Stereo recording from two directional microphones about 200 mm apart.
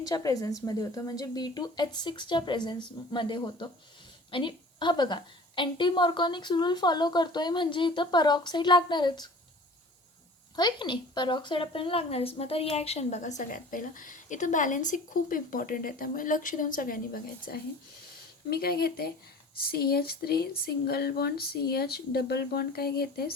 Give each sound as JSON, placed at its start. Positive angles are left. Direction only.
{"t": 0.0, "sound": "a woman's voice", "side_deg": 20}
{"t": 10.5, "sound": "a woman's voice", "side_deg": 20}